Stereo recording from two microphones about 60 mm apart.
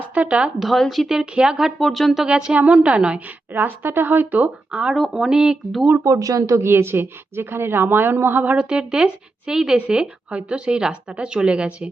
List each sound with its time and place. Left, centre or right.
0.1 s speech: right
0.6 s speech: centre
1.2 s speech: centre
1.8 s speech: centre
2.2 s speech: centre
3.5 s a woman's voice: right
4.7 s speech: centre
6.0 s speech: right
6.6 s a woman's voice: right
8.5 s speech: centre